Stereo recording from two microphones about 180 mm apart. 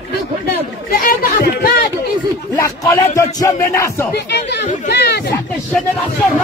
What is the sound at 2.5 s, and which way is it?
Speech, 15° left (ahead or behind).